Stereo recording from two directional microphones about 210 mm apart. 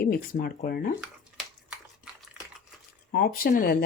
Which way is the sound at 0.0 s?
45° left (ahead or behind).